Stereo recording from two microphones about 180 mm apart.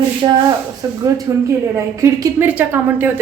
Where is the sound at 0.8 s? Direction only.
20° right (ahead or behind).